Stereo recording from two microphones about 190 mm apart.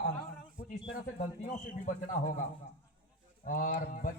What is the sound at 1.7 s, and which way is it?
Speech, 40° left (ahead or behind).